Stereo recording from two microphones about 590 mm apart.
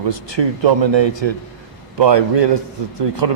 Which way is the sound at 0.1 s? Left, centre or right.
Right.